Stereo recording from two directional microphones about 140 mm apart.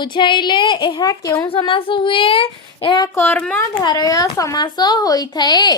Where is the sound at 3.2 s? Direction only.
10° left (ahead or behind).